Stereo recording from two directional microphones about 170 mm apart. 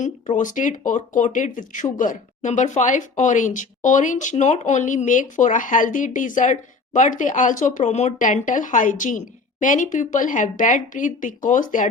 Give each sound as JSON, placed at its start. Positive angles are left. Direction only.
{"t": 0.0, "sound": "speech", "side_deg": 45}